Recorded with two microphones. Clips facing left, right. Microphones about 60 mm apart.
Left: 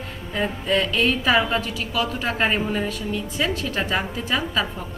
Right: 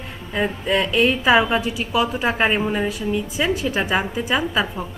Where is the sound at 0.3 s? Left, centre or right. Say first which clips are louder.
Right 2 dB; centre.